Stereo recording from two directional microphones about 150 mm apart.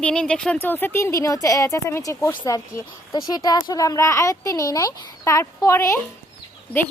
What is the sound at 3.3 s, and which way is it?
A woman's voice, 25° left (ahead or behind).